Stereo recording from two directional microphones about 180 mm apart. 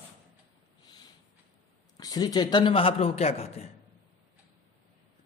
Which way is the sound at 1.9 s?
20° left (ahead or behind).